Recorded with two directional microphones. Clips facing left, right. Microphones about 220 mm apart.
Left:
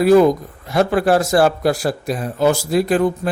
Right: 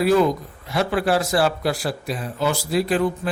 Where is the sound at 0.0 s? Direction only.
45° left (ahead or behind).